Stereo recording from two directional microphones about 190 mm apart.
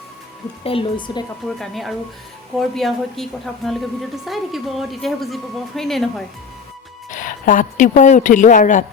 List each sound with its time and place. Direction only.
0.6 s speech: 30° left (ahead or behind)
1.5 s a woman's voice: centre (ahead or behind)
7.1 s a woman's voice: 45° left (ahead or behind)